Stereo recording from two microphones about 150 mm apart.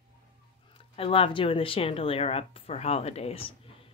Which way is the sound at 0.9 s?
40° left (ahead or behind).